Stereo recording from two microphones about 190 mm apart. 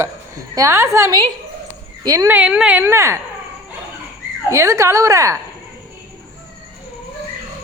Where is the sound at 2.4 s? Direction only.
5° right (ahead or behind).